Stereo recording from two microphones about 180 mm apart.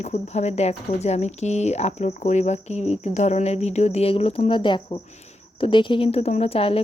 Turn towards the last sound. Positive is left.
turn(degrees=30)  # may be behind; listen again after turning